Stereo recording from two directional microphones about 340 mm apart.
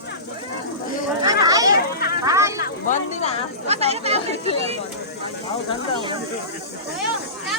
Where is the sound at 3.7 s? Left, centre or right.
Centre.